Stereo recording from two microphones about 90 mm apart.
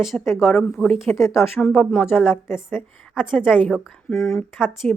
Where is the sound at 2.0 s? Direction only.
20° left (ahead or behind).